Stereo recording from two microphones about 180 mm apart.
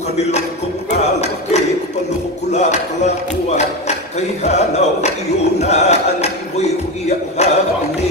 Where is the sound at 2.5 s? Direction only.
40° left (ahead or behind).